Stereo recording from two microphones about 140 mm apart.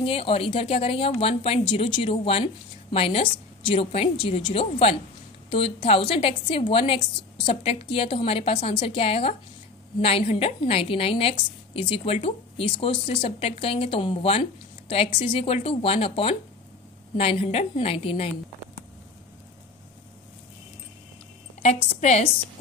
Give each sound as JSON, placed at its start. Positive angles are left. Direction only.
{"t": 0.0, "sound": "a woman's voice", "side_deg": 40}
{"t": 21.6, "sound": "a woman's voice", "side_deg": 55}